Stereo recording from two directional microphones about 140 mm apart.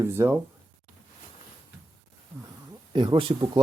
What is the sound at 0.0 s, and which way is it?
Speech, 20° right (ahead or behind).